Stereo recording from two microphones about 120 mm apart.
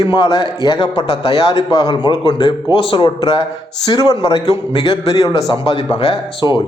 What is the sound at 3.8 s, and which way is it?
A man's voice, 35° left (ahead or behind).